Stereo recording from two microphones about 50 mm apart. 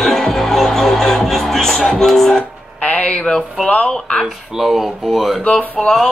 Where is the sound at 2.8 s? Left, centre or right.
Left.